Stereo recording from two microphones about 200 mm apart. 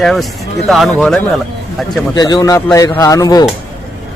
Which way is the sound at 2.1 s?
20° left (ahead or behind).